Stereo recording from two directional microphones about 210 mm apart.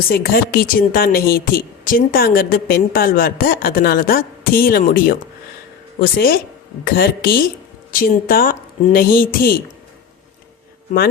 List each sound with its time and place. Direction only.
0.1 s a woman's voice: 45° left (ahead or behind)